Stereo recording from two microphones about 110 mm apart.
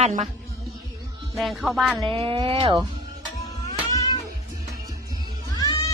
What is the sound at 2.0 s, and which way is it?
Speech, 55° right (ahead or behind).